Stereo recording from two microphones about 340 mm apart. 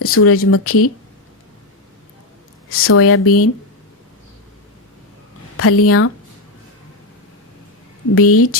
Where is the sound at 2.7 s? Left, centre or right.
Left.